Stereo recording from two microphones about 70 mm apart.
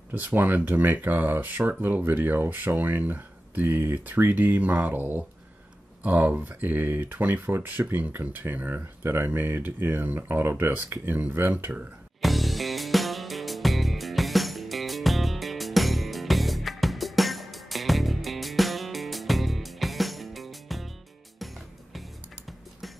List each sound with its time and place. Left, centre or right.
0.1 s speech: right
12.2 s music: centre